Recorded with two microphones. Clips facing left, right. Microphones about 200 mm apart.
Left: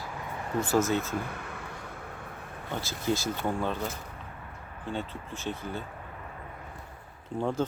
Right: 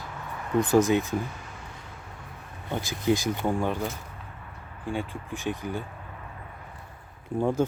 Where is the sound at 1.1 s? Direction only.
60° left (ahead or behind).